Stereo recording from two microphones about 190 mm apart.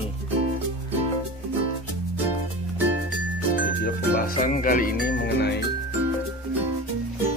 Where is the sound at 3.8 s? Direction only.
50° left (ahead or behind); by 5.5 s 65° left (ahead or behind).